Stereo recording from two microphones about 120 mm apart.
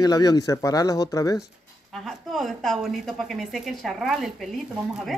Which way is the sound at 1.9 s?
Centre (ahead or behind).